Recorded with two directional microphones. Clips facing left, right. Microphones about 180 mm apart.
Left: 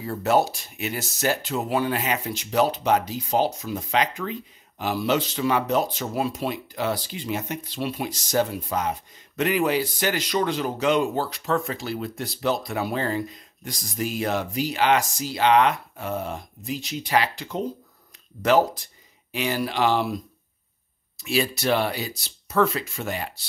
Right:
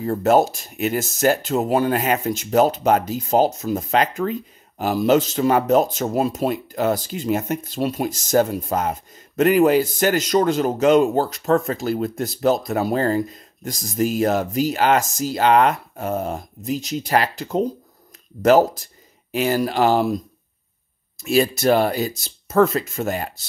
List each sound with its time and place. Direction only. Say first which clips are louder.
0.0 s speech: right 5 dB; 45° right (ahead or behind)
21.2 s speech: right 6 dB; 45° right (ahead or behind)